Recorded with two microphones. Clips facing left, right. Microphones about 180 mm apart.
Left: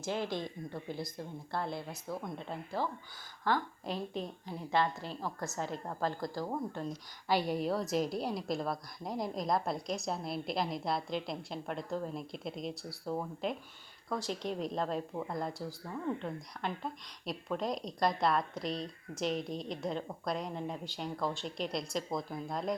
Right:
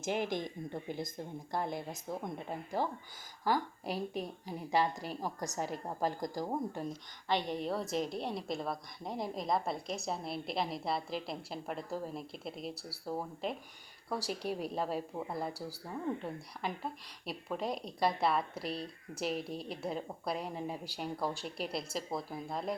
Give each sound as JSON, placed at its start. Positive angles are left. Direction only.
{"t": 0.0, "sound": "a woman's voice", "side_deg": -15}
{"t": 7.3, "sound": "a woman's voice", "side_deg": 5}